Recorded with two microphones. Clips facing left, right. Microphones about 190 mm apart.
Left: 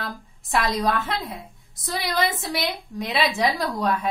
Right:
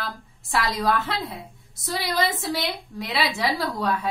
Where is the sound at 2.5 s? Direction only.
20° left (ahead or behind).